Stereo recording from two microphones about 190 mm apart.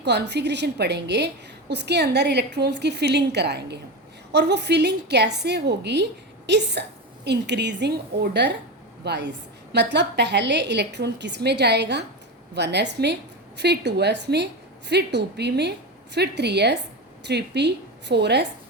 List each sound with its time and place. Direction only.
0.0 s a woman's voice: 65° right (ahead or behind)